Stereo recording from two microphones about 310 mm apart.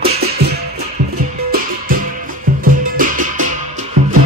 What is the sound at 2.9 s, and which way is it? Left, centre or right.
Music, right.